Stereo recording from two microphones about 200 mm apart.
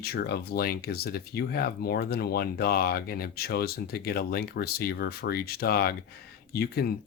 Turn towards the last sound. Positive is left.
turn(degrees=50)  # may be behind; listen again after turning